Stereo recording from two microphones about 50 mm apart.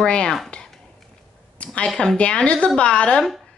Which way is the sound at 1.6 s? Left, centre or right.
Left.